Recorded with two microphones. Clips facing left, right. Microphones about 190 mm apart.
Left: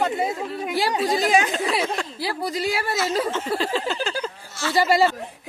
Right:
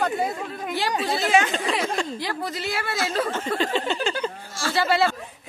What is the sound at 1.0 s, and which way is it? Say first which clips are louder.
A woman's voice: even; 15° left (ahead or behind).